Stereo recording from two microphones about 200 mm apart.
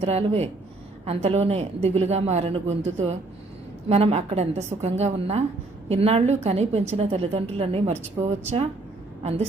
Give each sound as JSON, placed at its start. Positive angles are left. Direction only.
{"t": 0.0, "sound": "a woman's voice", "side_deg": -30}